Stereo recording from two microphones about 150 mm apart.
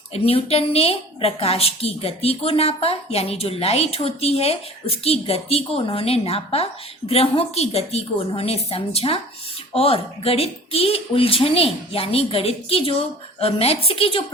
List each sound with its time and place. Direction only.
0.1 s a woman's voice: 40° left (ahead or behind)